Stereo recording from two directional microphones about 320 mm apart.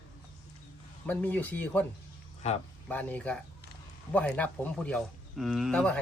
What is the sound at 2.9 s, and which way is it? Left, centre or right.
A man's voice, centre.